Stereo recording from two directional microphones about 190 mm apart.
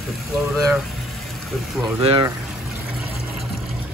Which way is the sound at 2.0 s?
30° right (ahead or behind).